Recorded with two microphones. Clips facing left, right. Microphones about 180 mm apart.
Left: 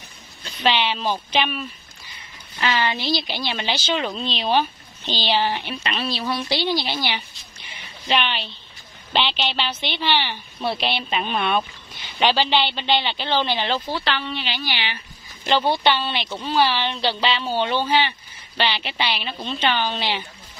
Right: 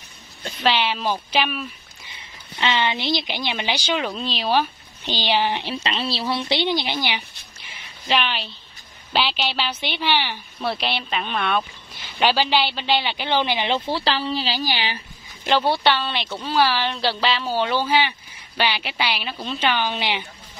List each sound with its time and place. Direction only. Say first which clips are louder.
0.7 s a woman's voice: even; 5° right (ahead or behind)
2.6 s a woman's voice: even; 20° right (ahead or behind)
5.6 s speech: right 1 dB; 30° right (ahead or behind)
7.6 s a sound: left 1 dB; centre (ahead or behind)
9.1 s a woman's voice: even; 5° right (ahead or behind)
12.2 s a woman's voice: even; 10° right (ahead or behind)
13.7 s speech: right 2 dB; 30° right (ahead or behind)
15.4 s a woman's voice: even; 10° right (ahead or behind)